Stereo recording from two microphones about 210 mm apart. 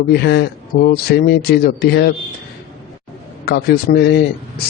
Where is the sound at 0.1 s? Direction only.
50° left (ahead or behind).